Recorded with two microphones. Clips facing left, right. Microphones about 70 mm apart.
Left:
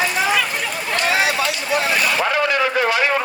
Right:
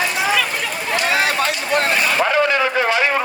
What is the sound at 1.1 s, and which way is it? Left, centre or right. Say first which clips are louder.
Speech: right 1 dB; right.